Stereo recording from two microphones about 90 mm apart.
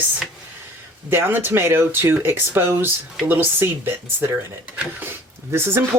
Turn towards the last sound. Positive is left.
turn(degrees=-30)  # may be behind; listen again after turning